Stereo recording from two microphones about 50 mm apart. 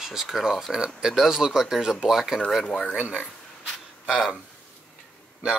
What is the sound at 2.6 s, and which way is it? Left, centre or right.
Speech, left.